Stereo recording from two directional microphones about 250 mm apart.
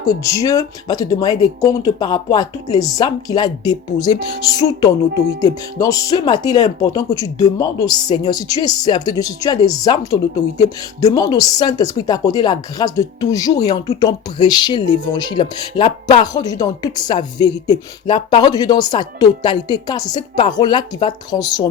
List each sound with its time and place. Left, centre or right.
0.0 s speech: centre
5.4 s speech: centre